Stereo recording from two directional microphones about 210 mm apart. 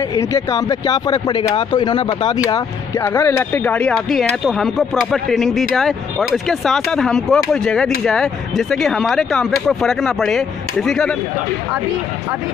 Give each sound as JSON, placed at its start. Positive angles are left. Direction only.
{"t": 0.1, "sound": "speech", "side_deg": 15}